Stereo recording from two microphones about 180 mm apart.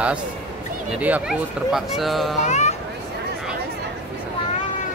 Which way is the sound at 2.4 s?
40° left (ahead or behind).